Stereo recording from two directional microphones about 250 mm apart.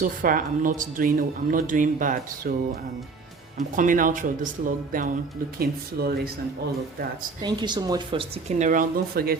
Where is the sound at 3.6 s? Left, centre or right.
Right.